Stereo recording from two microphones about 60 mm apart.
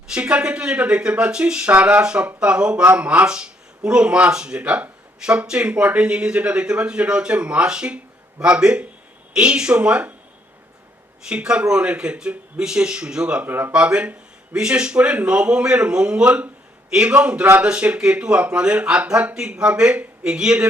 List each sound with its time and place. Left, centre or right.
0.1 s speech: centre
3.2 s speech: centre
11.3 s speech: centre
13.4 s speech: right